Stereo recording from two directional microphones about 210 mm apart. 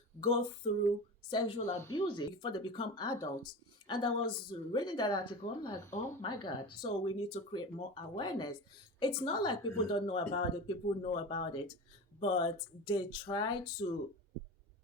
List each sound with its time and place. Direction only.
0.2 s a woman's voice: 25° left (ahead or behind)